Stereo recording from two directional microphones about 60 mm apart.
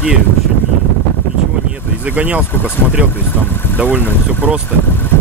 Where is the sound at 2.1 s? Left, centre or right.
Right.